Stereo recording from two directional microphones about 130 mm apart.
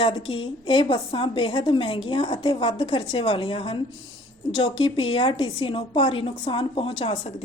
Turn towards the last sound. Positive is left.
turn(degrees=45)  # may be behind; listen again after turning